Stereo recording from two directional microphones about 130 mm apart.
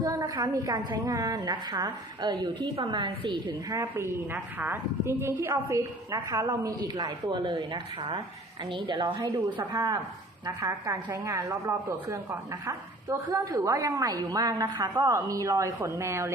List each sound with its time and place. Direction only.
0.0 s a woman's voice: 30° right (ahead or behind)